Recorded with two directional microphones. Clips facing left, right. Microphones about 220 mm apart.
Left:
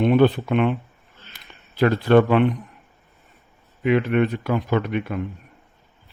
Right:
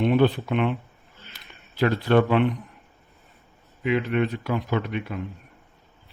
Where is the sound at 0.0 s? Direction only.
55° left (ahead or behind).